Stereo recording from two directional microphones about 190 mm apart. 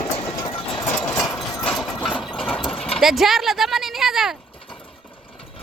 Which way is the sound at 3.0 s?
Centre (ahead or behind).